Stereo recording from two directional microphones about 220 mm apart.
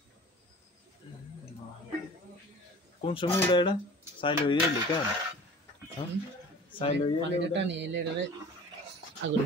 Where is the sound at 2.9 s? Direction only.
25° left (ahead or behind).